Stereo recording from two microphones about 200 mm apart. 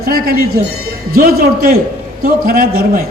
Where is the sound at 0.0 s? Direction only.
50° right (ahead or behind).